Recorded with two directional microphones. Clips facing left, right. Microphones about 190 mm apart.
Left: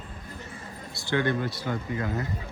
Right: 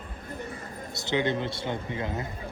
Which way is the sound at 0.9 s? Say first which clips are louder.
Left 1 dB; 20° right (ahead or behind).